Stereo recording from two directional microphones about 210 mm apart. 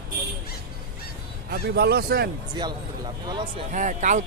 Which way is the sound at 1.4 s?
50° right (ahead or behind).